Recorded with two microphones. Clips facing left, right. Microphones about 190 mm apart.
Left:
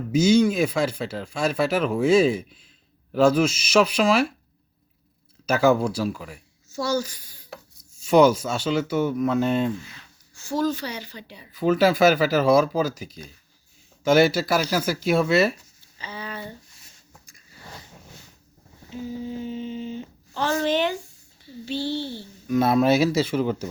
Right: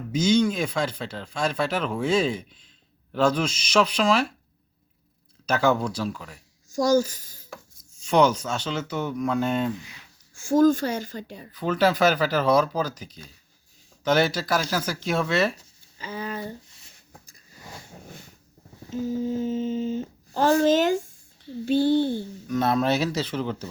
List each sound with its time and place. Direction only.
0.1 s speech: 10° left (ahead or behind)
5.5 s speech: 10° left (ahead or behind)
6.7 s a sound: 45° right (ahead or behind)
7.9 s speech: 10° left (ahead or behind)
9.8 s speech: 15° right (ahead or behind)
10.3 s speech: 50° right (ahead or behind)
11.5 s speech: 10° left (ahead or behind)
16.0 s speech: 45° right (ahead or behind)
18.9 s speech: 45° right (ahead or behind)
22.4 s speech: 10° left (ahead or behind)